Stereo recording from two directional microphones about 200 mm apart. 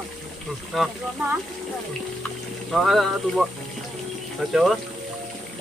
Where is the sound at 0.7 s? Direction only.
Centre (ahead or behind).